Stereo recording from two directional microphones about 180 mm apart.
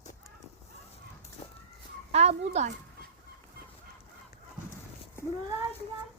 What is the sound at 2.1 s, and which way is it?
Speech, 35° right (ahead or behind).